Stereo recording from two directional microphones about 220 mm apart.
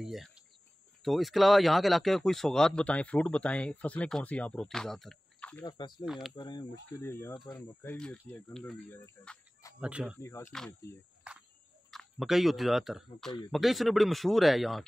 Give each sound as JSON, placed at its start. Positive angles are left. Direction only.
{"t": 0.0, "sound": "speech", "side_deg": 0}
{"t": 5.7, "sound": "speech", "side_deg": 20}
{"t": 6.0, "sound": "speech", "side_deg": 0}
{"t": 6.3, "sound": "speech", "side_deg": 20}
{"t": 10.2, "sound": "speech", "side_deg": 10}